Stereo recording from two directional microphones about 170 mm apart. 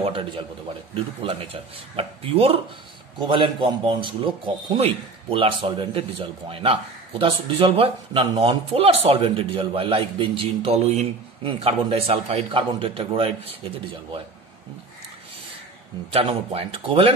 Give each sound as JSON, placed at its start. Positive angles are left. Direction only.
{"t": 0.0, "sound": "a man's voice", "side_deg": -30}
{"t": 16.1, "sound": "a man's voice", "side_deg": -35}